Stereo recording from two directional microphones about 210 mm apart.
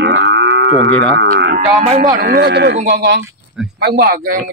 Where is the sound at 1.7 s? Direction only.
35° right (ahead or behind).